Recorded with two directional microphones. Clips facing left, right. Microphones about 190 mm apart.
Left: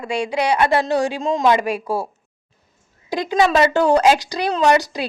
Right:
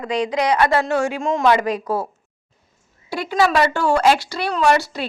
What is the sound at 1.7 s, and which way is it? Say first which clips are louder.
Speech: even; 10° left (ahead or behind).